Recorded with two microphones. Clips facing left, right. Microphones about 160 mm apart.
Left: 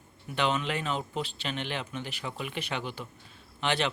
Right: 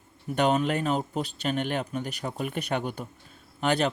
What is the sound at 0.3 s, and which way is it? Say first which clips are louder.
Speech: right 5 dB; 45° right (ahead or behind).